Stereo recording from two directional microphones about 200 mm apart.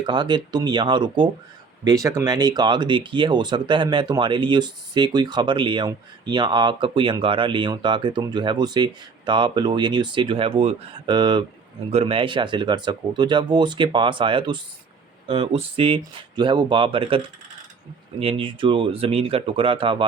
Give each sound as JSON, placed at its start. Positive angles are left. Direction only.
{"t": 0.0, "sound": "speech", "side_deg": -20}